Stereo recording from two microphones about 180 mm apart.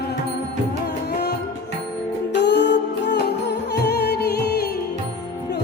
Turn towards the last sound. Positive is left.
turn(degrees=65)  # may be behind; listen again after turning